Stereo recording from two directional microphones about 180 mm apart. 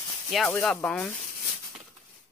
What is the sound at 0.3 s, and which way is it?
Speech, centre (ahead or behind).